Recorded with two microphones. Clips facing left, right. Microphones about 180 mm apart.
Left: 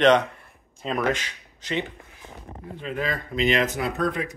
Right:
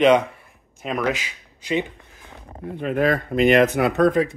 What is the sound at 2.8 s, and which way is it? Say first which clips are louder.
Speech: right 9 dB; 55° right (ahead or behind).